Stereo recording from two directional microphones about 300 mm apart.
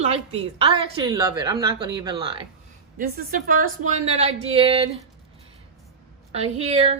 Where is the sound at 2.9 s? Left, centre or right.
Right.